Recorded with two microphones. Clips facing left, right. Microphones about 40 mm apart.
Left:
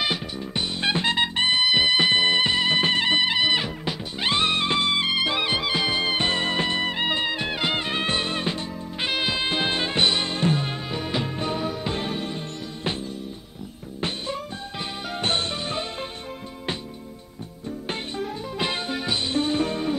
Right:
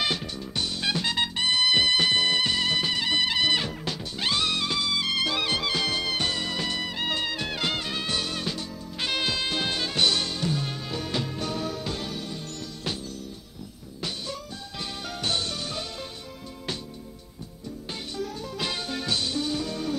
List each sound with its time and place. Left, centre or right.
0.0 s music: centre
0.7 s music: left
1.6 s music: centre; by 3.2 s left
3.2 s music: left
14.0 s music: left
18.1 s music: left
19.3 s music: left